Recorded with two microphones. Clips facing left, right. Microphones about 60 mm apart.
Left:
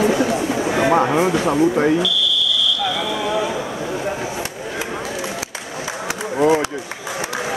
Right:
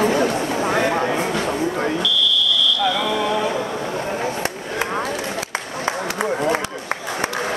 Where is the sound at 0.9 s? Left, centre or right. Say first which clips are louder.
Left 5 dB; centre.